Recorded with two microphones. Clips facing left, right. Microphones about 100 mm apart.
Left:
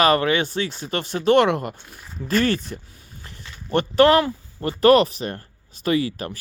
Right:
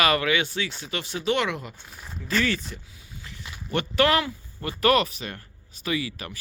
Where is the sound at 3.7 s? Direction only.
35° left (ahead or behind).